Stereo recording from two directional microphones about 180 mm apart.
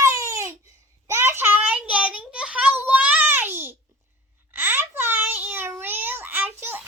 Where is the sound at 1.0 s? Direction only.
15° right (ahead or behind).